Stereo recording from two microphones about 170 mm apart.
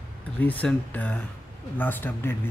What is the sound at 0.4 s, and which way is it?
Speech, 10° left (ahead or behind).